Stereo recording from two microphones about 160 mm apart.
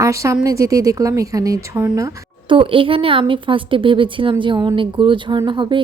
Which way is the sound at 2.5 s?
35° right (ahead or behind).